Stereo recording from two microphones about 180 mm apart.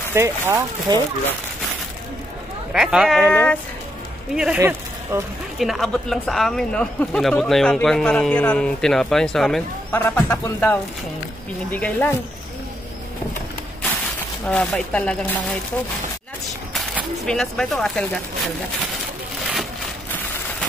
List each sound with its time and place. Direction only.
0.1 s speech: 15° right (ahead or behind)
2.7 s speech: 5° right (ahead or behind)
3.3 s speech: 10° left (ahead or behind)
4.6 s speech: 15° right (ahead or behind)
5.6 s speech: centre (ahead or behind)
14.4 s speech: 5° left (ahead or behind)
16.7 s speech: centre (ahead or behind)